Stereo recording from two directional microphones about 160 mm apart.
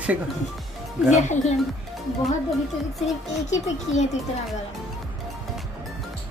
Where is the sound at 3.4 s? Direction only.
45° left (ahead or behind).